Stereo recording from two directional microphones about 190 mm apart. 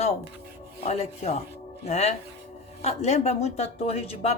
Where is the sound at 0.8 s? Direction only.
35° left (ahead or behind).